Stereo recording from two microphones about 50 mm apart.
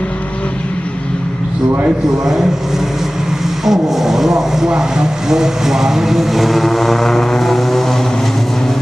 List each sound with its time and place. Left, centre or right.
2.2 s speech: centre